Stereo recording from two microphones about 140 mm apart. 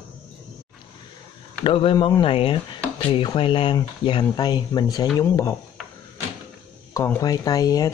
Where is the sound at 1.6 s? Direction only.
40° left (ahead or behind).